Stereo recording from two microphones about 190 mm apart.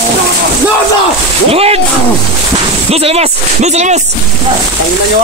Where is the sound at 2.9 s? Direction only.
30° right (ahead or behind).